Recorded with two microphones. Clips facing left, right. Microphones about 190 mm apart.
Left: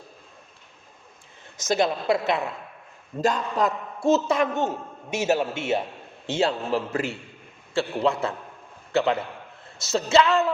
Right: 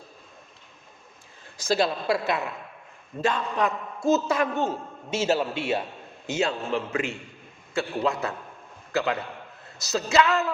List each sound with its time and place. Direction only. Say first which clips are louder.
1.6 s a man's voice: left 1 dB; 20° left (ahead or behind)
3.2 s a man's voice: left 2 dB; 40° left (ahead or behind)
4.1 s a man's voice: left 2 dB; 25° left (ahead or behind)